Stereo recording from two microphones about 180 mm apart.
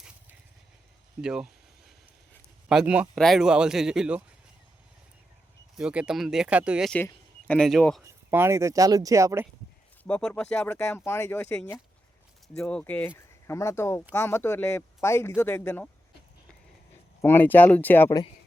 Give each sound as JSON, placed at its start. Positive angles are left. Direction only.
{"t": 1.2, "sound": "speech", "side_deg": -5}
{"t": 2.6, "sound": "speech", "side_deg": -5}
{"t": 5.7, "sound": "speech", "side_deg": -5}
{"t": 6.9, "sound": "speech", "side_deg": 10}
{"t": 8.0, "sound": "speech", "side_deg": -15}
{"t": 10.0, "sound": "speech", "side_deg": 5}
{"t": 17.2, "sound": "speech", "side_deg": 10}